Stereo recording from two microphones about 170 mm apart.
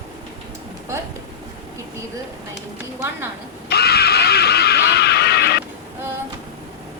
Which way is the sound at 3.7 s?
70° left (ahead or behind).